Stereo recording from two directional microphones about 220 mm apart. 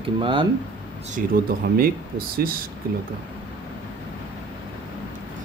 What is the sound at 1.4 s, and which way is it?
Speech, 40° right (ahead or behind).